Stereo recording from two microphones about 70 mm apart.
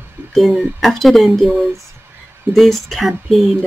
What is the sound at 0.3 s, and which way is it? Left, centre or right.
Speech, centre.